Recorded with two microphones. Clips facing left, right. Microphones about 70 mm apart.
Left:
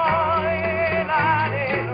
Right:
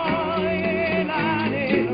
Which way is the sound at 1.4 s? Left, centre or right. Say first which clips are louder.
Right 1 dB; centre.